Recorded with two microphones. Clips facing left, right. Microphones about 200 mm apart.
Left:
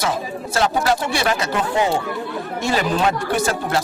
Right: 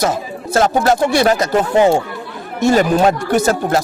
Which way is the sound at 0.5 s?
45° right (ahead or behind).